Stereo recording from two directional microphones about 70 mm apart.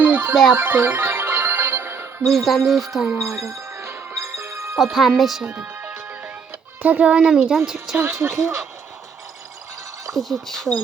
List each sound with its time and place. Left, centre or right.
0.0 s music: right
2.3 s speech: centre
3.2 s music: right
4.8 s speech: centre
6.8 s speech: right
8.2 s speech: right
10.1 s speech: centre